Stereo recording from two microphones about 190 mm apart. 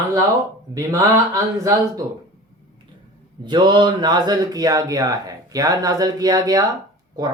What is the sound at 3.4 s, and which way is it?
A man's voice, 25° right (ahead or behind).